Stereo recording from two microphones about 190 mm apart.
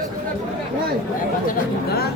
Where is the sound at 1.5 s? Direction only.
55° left (ahead or behind).